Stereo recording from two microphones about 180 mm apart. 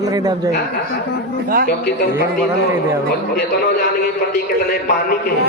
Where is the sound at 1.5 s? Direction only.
50° right (ahead or behind).